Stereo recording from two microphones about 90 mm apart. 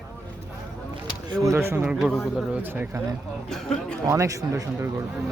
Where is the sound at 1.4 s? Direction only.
30° right (ahead or behind).